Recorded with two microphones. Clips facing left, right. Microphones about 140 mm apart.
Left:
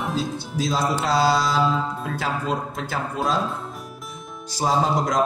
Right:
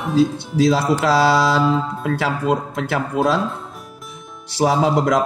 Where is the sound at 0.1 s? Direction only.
70° right (ahead or behind).